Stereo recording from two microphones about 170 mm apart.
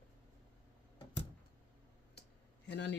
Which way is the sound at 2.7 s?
90° left.